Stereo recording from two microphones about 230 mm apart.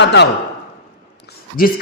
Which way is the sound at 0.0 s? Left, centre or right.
Left.